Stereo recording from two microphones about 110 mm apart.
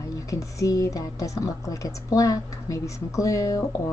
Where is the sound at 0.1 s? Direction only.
30° left (ahead or behind).